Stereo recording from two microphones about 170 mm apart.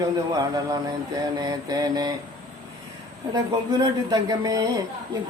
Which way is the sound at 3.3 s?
25° right (ahead or behind).